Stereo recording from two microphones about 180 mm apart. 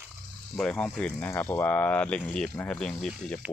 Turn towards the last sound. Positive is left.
turn(degrees=5)  # may be behind; listen again after turning